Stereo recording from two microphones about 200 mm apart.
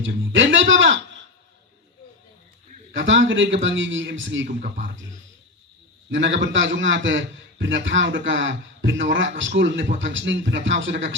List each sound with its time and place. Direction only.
0.0 s speech: 70° right (ahead or behind)
2.9 s a man's voice: 70° right (ahead or behind)
6.1 s a man's voice: 65° right (ahead or behind)